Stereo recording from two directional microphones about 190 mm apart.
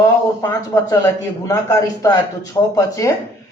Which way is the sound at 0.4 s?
15° left (ahead or behind).